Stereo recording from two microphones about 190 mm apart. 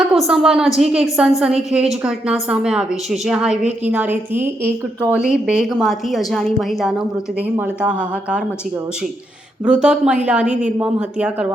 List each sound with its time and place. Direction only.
0.3 s a woman's voice: 5° right (ahead or behind)
5.3 s a woman's voice: 5° right (ahead or behind)
9.6 s a woman's voice: 5° right (ahead or behind)